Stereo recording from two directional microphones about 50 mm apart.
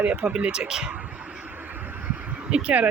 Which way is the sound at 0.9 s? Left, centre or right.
Right.